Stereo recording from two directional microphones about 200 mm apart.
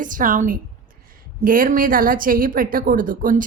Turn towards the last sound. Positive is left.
turn(degrees=-45)  # may be behind; listen again after turning